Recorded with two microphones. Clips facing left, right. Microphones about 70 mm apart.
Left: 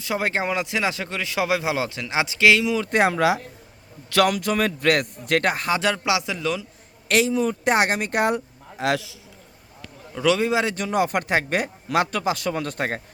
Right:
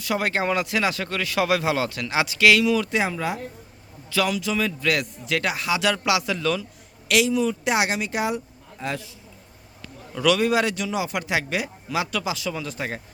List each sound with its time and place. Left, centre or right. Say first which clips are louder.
0.0 s speech: even; left
2.9 s speech: left 6 dB; left
4.1 s speech: left 4 dB; left
6.1 s speech: right 1 dB; left
7.1 s speech: even; left
8.8 s a man's voice: left 7 dB; left
10.2 s speech: even; left
10.8 s speech: left 4 dB; left